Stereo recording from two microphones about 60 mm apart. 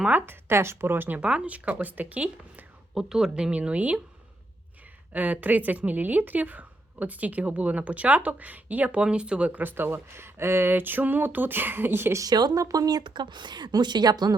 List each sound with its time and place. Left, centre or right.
0.1 s speech: right
1.2 s a woman's voice: centre
2.9 s speech: centre; by 4.0 s right
5.1 s a woman's voice: right
12.2 s a woman's voice: right